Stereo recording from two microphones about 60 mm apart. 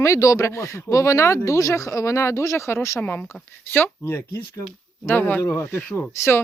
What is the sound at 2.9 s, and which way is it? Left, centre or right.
Speech, left.